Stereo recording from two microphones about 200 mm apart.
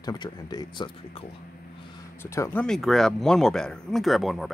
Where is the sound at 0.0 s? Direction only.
20° left (ahead or behind).